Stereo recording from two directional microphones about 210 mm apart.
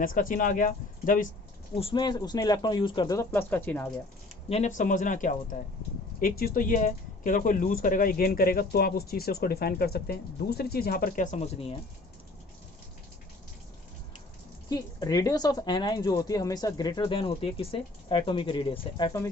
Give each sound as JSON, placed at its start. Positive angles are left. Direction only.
{"t": 0.0, "sound": "speech", "side_deg": 40}
{"t": 1.7, "sound": "speech", "side_deg": 25}
{"t": 4.4, "sound": "speech", "side_deg": 30}
{"t": 14.7, "sound": "speech", "side_deg": 20}